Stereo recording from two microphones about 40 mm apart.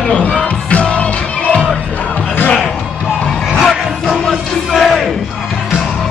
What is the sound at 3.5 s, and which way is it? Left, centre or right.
Music, centre.